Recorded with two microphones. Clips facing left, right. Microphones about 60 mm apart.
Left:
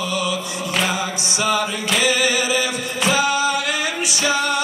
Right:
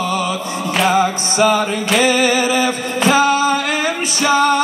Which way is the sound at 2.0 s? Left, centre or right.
Right.